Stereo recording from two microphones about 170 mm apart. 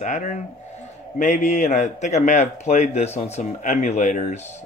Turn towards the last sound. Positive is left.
turn(degrees=45)  # may be behind; listen again after turning